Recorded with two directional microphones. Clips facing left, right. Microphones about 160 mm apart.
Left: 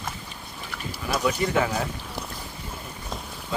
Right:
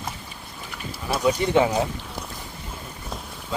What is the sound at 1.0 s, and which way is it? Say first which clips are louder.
Speech: right 3 dB; 25° right (ahead or behind).